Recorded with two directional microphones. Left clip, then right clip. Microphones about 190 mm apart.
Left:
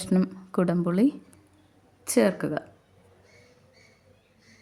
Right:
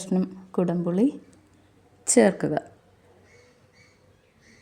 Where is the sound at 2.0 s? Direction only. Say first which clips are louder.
Right 4 dB; 5° right (ahead or behind).